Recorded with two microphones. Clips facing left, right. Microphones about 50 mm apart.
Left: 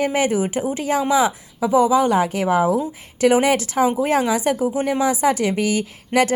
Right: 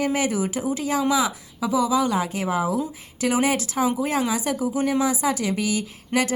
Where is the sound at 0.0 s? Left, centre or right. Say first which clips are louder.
Left 4 dB; left.